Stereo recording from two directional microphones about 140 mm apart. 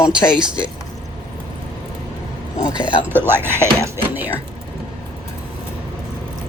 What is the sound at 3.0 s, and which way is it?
Speech, 15° right (ahead or behind).